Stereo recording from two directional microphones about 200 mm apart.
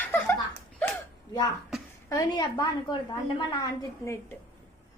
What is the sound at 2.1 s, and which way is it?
Speech, 20° left (ahead or behind).